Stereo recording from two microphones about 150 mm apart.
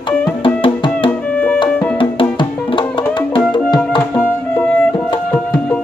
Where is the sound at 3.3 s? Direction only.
30° left (ahead or behind).